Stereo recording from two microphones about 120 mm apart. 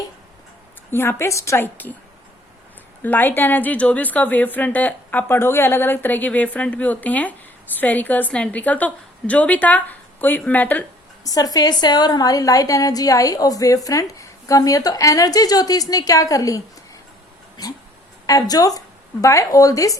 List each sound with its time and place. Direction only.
0.9 s a woman's voice: 20° left (ahead or behind)
3.0 s a woman's voice: 15° left (ahead or behind)
11.2 s a woman's voice: 30° left (ahead or behind)
18.3 s a woman's voice: 30° left (ahead or behind)